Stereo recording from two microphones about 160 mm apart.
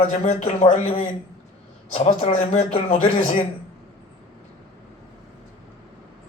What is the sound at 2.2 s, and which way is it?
A man's voice, 40° left (ahead or behind).